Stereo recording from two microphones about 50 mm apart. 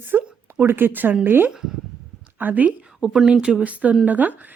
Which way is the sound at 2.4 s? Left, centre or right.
Right.